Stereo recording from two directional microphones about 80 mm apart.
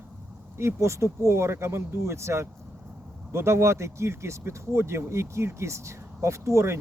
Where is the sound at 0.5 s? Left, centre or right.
Right.